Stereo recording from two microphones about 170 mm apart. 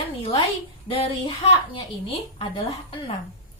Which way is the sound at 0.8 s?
30° left (ahead or behind).